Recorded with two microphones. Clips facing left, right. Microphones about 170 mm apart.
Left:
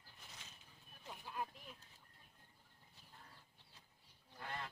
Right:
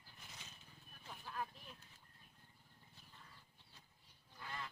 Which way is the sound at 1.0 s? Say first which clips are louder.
Left 1 dB; 15° left (ahead or behind).